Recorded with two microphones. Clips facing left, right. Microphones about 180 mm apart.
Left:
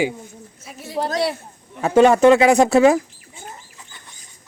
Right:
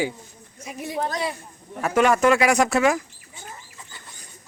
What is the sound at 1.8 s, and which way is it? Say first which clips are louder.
Speech: left 6 dB; 30° left (ahead or behind).